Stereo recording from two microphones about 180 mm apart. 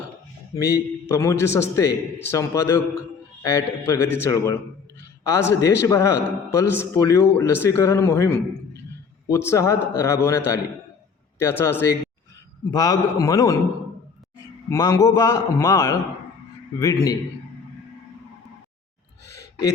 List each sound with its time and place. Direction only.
0.6 s a man's voice: 15° left (ahead or behind)
14.7 s a man's voice: 20° left (ahead or behind)
19.4 s a sound: 20° left (ahead or behind)